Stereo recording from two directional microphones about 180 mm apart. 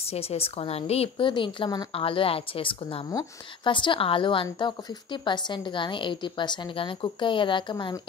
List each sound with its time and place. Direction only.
0.0 s speech: 35° left (ahead or behind)